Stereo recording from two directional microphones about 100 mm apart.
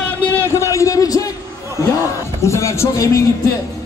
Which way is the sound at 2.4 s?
30° left (ahead or behind).